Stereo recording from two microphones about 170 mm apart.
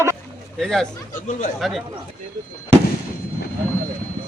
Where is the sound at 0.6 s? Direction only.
Centre (ahead or behind).